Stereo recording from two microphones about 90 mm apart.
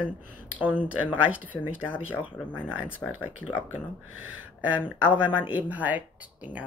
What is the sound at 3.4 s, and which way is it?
Speech, 20° left (ahead or behind).